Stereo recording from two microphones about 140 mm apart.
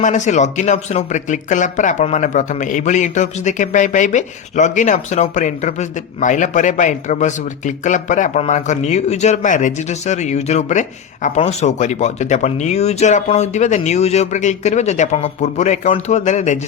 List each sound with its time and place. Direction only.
0.0 s speech: 60° left (ahead or behind)